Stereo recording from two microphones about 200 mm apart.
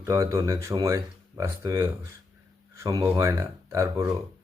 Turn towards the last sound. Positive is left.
turn(degrees=-15)  # may be behind; listen again after turning